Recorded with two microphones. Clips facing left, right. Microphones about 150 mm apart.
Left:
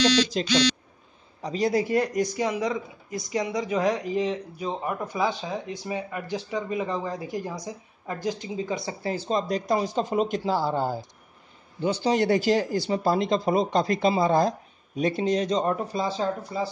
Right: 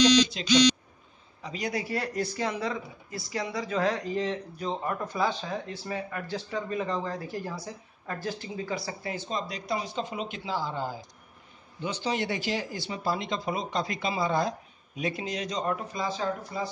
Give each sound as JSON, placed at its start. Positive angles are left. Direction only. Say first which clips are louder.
{"t": 0.3, "sound": "speech", "louder": "right 1 dB", "side_deg": 45}
{"t": 9.1, "sound": "speech", "louder": "left 9 dB", "side_deg": 40}